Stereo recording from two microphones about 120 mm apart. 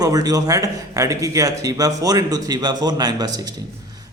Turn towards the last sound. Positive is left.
turn(degrees=-35)  # may be behind; listen again after turning